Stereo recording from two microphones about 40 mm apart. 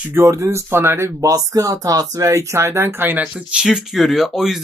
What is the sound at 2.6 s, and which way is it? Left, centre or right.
Speech, right.